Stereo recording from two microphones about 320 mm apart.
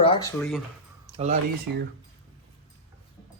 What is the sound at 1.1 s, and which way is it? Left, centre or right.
Speech, right.